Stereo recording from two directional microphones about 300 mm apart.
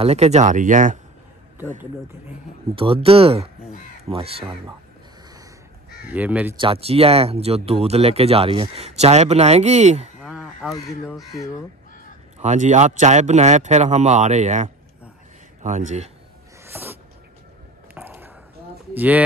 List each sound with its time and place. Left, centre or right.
0.0 s speech: right
2.7 s speech: centre
6.0 s speech: centre
6.6 s speech: centre
10.2 s speech: centre
12.4 s speech: right
16.6 s a sound: centre
18.9 s speech: centre